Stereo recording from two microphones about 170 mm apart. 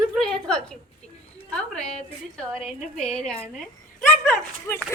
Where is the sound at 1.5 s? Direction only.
5° left (ahead or behind).